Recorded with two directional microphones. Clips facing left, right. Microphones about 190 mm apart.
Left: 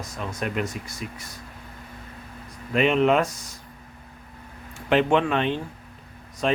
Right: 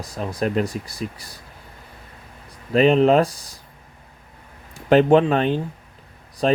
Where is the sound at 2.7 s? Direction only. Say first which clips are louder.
Right 5 dB; 35° right (ahead or behind).